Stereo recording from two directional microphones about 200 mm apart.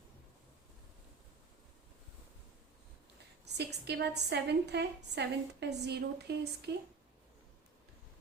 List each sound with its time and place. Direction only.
3.4 s a woman's voice: 55° right (ahead or behind)